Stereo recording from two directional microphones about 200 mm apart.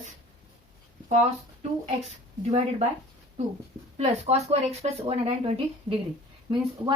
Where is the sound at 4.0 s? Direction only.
30° right (ahead or behind).